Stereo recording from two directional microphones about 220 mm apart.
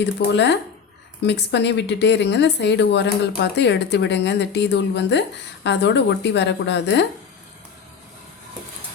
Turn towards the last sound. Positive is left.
turn(degrees=50)  # may be behind; listen again after turning